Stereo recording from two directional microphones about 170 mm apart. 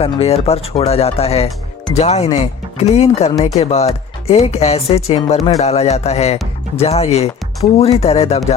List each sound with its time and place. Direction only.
0.0 s speech: 35° left (ahead or behind)